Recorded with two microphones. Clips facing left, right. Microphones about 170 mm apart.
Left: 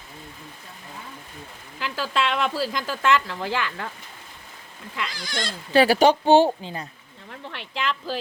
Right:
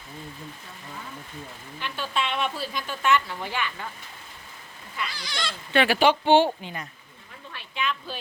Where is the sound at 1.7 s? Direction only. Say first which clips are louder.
Left 4 dB; 90° left.